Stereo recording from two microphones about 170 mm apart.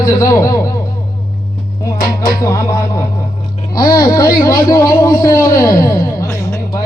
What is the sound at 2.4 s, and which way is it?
A man's voice, 20° left (ahead or behind).